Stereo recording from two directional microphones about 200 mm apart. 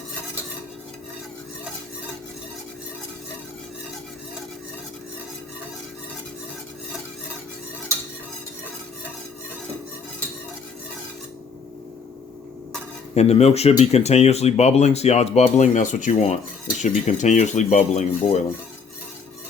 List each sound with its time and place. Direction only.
13.1 s speech: 30° left (ahead or behind)